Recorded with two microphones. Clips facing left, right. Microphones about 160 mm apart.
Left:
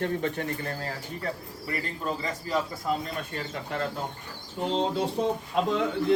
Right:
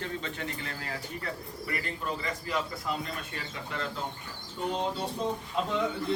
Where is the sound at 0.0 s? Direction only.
50° left (ahead or behind); by 2.6 s 35° left (ahead or behind).